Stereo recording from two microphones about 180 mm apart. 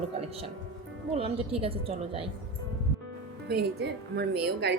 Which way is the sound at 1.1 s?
30° right (ahead or behind).